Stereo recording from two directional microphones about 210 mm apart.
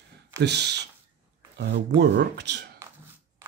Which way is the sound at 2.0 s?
55° right (ahead or behind).